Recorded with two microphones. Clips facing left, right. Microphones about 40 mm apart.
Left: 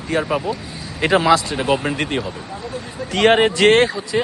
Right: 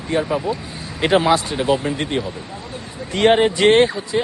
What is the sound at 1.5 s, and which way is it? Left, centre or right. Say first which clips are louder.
Speech: even; left.